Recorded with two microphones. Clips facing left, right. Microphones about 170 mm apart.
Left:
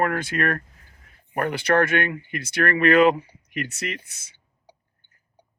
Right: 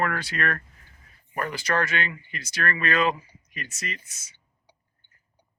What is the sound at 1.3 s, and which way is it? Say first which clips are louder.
Speech: left 6 dB; 60° left (ahead or behind).